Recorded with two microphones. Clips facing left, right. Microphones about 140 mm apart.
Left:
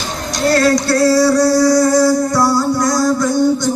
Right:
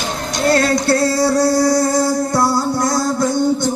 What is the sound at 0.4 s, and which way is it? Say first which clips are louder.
Music: left 2 dB; 25° right (ahead or behind).